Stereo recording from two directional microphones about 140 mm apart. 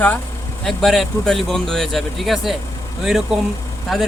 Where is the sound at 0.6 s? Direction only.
Centre (ahead or behind).